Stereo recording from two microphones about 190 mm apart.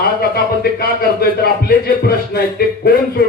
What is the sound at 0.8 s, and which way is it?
A man's voice, 55° left (ahead or behind).